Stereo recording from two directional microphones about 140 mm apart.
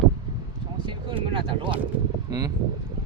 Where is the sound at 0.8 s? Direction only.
40° right (ahead or behind).